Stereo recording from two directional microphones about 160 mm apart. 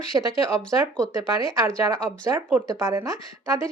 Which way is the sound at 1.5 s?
20° right (ahead or behind).